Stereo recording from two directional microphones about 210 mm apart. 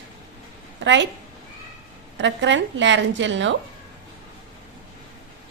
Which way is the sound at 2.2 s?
60° right (ahead or behind).